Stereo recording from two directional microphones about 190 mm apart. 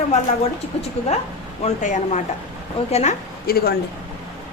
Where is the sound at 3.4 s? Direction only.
50° left (ahead or behind).